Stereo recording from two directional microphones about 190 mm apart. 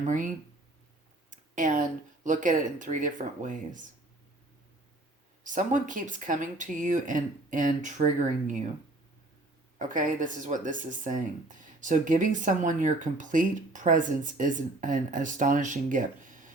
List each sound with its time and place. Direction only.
0.0 s speech: 40° right (ahead or behind)
1.3 s a sound: 40° right (ahead or behind)
2.2 s speech: 40° right (ahead or behind)
5.4 s speech: 40° right (ahead or behind)
9.7 s speech: 45° right (ahead or behind)